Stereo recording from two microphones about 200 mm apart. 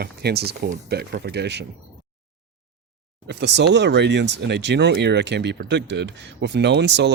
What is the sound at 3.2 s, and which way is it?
Speech, 60° right (ahead or behind).